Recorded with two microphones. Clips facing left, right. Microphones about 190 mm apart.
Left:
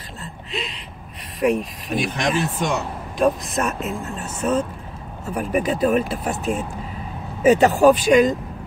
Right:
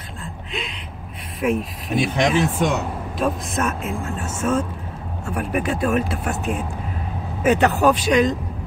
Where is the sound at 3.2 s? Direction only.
Centre (ahead or behind).